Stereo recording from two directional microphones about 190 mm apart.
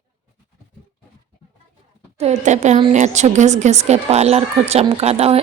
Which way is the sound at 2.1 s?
35° right (ahead or behind).